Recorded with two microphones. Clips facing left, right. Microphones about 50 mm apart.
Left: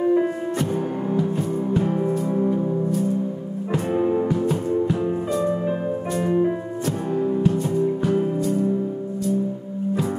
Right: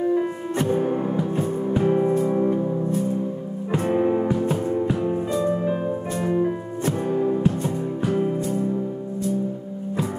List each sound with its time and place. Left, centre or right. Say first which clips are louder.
0.0 s music: left 3 dB; centre
0.7 s music: right 2 dB; centre
6.2 s music: left 2 dB; centre
7.1 s music: left 1 dB; centre